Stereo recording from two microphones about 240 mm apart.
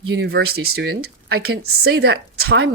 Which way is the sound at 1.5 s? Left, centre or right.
Right.